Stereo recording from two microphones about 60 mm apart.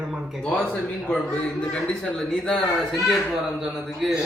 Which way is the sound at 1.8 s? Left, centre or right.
Centre.